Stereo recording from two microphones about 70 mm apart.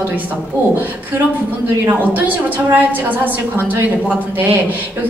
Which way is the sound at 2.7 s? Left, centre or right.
Right.